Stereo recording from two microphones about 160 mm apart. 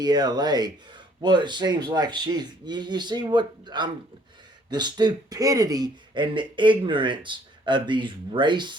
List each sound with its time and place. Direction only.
0.0 s speech: 25° right (ahead or behind)